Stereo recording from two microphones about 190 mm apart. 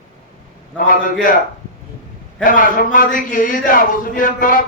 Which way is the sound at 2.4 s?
45° left (ahead or behind).